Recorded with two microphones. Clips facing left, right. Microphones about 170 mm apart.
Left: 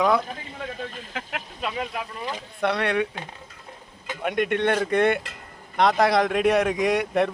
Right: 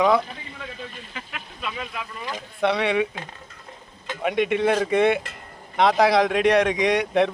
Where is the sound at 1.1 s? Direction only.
65° left (ahead or behind).